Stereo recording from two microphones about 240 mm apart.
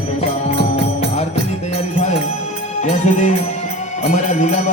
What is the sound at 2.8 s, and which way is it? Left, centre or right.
Music, left.